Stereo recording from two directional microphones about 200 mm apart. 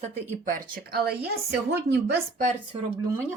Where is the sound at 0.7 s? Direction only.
50° right (ahead or behind).